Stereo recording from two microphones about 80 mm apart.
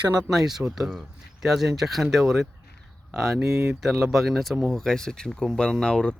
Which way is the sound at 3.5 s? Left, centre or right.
Right.